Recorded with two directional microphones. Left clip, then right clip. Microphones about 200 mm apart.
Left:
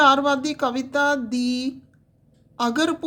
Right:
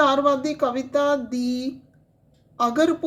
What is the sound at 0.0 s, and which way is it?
Speech, 35° left (ahead or behind).